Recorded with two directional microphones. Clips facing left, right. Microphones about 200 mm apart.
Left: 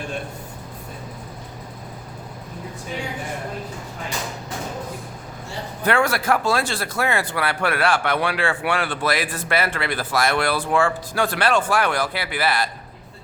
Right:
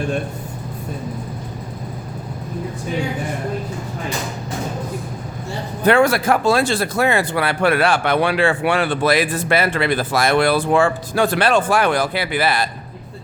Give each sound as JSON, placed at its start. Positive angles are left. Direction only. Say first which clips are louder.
{"t": 5.8, "sound": "speech", "louder": "right 6 dB", "side_deg": -25}